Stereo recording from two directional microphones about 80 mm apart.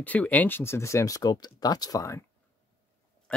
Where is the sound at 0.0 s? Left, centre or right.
Left.